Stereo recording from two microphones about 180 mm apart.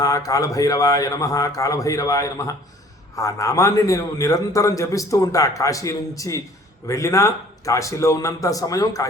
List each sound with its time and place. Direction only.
0.0 s a man's voice: 20° left (ahead or behind)